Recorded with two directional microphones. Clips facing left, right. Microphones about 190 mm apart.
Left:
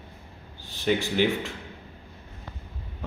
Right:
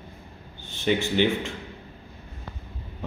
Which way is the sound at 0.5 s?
Centre (ahead or behind).